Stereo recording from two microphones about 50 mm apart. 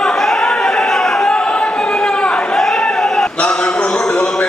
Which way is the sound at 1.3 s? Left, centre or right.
Left.